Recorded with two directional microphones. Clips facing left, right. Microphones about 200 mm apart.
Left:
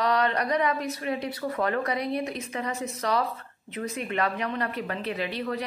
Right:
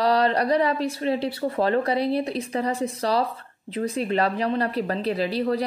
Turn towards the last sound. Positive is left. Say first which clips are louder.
# right 6 dB
turn(degrees=-35)  # may be behind; listen again after turning